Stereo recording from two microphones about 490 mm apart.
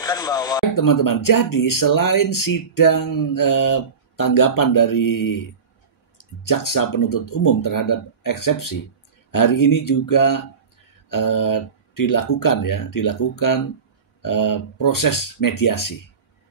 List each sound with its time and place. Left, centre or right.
0.0 s speech: centre
0.7 s speech: left